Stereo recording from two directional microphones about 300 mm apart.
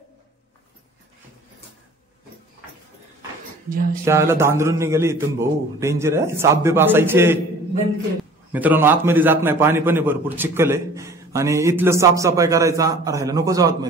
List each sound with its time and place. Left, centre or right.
3.6 s speech: right
4.0 s a man's voice: centre
8.5 s a man's voice: centre